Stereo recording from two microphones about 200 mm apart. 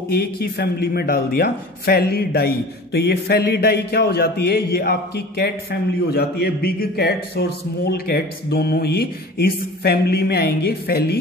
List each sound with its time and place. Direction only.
0.1 s a man's voice: 50° left (ahead or behind)